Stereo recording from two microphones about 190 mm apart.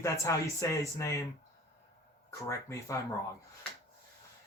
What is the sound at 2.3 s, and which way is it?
Speech, 15° left (ahead or behind).